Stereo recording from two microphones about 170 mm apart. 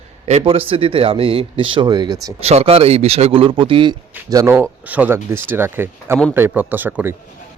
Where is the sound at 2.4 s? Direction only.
35° right (ahead or behind).